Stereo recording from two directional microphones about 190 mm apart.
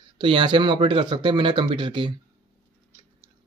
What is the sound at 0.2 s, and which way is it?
Speech, 25° right (ahead or behind).